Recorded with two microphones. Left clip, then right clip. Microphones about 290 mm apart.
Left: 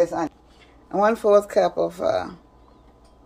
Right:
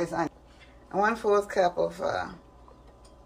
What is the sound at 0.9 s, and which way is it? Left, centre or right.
Speech, left.